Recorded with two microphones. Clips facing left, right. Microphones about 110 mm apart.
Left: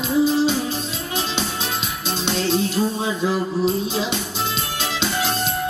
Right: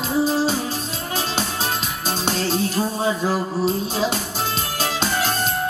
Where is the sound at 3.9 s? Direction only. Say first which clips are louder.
Right 1 dB; 40° right (ahead or behind).